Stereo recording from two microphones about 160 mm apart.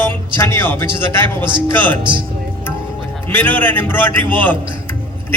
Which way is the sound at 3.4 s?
10° left (ahead or behind).